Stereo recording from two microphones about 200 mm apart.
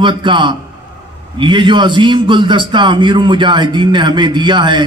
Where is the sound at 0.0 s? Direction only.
25° right (ahead or behind).